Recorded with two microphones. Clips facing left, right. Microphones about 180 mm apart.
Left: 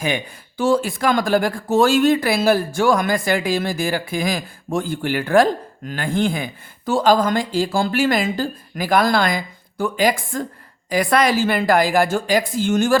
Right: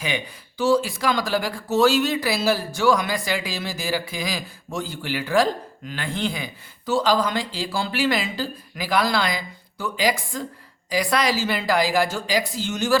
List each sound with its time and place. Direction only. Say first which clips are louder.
0.0 s speech: left 5 dB; 50° left (ahead or behind)